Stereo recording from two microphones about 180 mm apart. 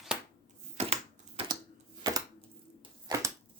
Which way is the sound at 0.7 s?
35° right (ahead or behind).